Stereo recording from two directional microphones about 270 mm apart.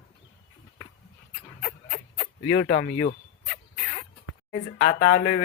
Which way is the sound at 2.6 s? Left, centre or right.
Left.